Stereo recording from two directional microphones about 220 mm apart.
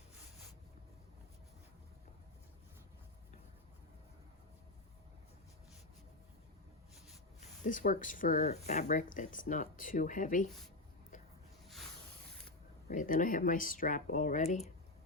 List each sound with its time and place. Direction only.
7.6 s speech: 35° left (ahead or behind)
12.9 s speech: 35° left (ahead or behind)